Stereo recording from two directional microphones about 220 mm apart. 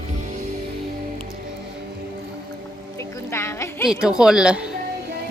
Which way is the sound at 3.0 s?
10° left (ahead or behind).